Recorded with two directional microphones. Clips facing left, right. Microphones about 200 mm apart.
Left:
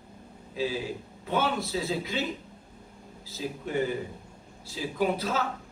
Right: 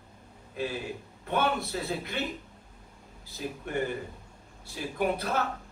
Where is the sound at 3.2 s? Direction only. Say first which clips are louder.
Left 2 dB; 60° right (ahead or behind).